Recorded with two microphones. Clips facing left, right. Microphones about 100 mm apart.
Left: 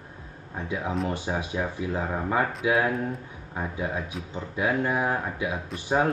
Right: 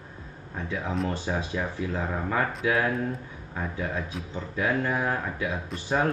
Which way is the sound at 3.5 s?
15° left (ahead or behind).